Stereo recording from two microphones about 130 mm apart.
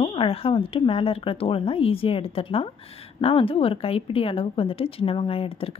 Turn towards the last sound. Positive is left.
turn(degrees=45)  # may be behind; listen again after turning